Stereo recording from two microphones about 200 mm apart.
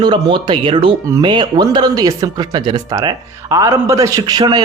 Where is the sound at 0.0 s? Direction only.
25° right (ahead or behind).